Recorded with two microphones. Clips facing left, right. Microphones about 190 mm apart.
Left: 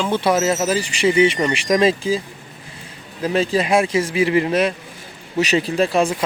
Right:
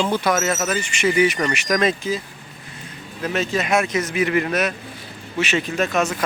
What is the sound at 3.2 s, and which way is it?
A man's voice, 30° left (ahead or behind).